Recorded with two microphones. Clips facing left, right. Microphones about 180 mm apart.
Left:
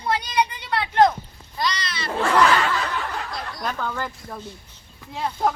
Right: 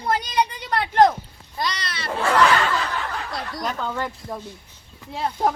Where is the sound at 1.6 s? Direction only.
55° right (ahead or behind).